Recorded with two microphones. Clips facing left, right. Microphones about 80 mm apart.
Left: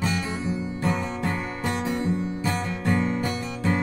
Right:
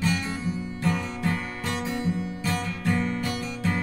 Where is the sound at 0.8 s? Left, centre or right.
Left.